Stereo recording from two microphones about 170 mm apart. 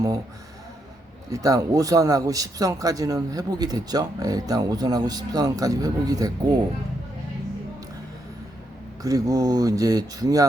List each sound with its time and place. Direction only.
1.3 s a man's voice: 20° right (ahead or behind)
9.0 s a man's voice: 20° right (ahead or behind)